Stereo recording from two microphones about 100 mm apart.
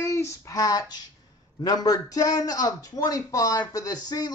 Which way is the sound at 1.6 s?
40° left (ahead or behind).